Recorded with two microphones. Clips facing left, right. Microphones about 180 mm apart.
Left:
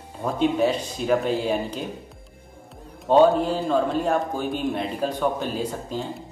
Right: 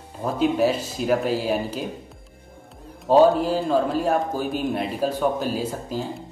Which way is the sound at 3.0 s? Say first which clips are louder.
Right 1 dB; 5° right (ahead or behind).